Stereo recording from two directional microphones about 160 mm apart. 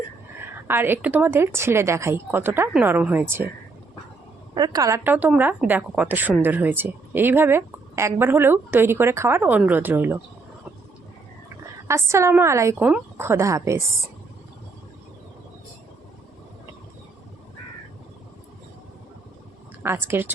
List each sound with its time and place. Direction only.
0.7 s speech: 15° right (ahead or behind)
4.5 s speech: 25° right (ahead or behind)
11.9 s speech: 15° right (ahead or behind)
19.8 s speech: 15° right (ahead or behind)